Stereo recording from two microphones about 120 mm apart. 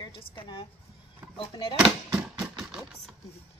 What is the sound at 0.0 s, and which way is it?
A woman's voice, 40° left (ahead or behind).